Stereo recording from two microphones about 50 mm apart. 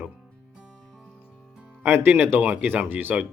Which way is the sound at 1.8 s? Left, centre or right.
Right.